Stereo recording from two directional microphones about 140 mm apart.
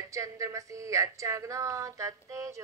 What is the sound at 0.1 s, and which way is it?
Speech, 20° right (ahead or behind).